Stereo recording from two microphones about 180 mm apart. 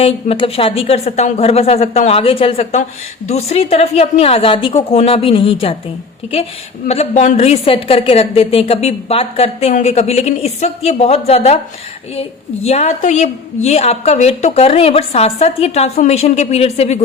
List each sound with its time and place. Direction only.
0.0 s a woman's voice: 30° left (ahead or behind)
6.8 s a woman's voice: 35° left (ahead or behind)
12.6 s a woman's voice: 35° left (ahead or behind)